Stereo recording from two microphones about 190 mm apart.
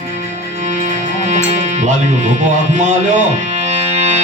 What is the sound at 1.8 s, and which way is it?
Speech, 40° right (ahead or behind).